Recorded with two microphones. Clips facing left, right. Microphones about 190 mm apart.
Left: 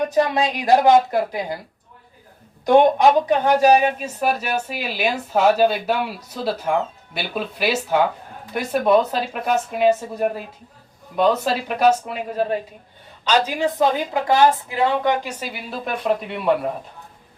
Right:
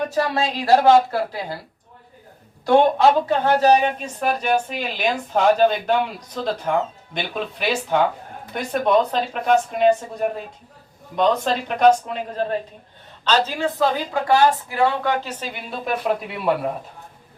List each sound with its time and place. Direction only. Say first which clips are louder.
0.1 s a woman's voice: left 3 dB; 20° left (ahead or behind)
2.6 s a woman's voice: left 1 dB; 15° left (ahead or behind); by 16.6 s centre (ahead or behind)